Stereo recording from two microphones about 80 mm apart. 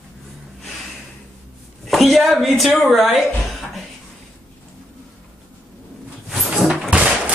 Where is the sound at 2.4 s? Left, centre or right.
Centre.